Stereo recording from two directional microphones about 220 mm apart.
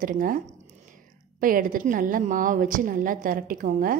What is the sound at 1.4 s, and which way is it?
A woman's voice, 40° right (ahead or behind).